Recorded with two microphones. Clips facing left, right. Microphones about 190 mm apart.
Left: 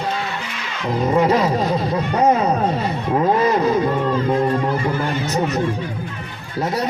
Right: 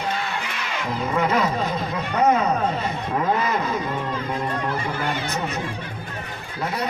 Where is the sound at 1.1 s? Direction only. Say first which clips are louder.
Left 5 dB; 35° left (ahead or behind).